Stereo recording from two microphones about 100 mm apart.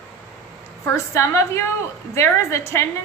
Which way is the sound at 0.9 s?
30° left (ahead or behind).